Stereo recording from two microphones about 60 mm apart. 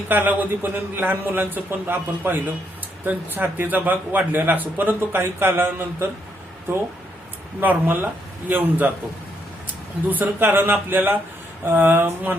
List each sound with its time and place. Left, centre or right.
0.1 s a man's voice: right
7.6 s a man's voice: right
10.1 s a man's voice: right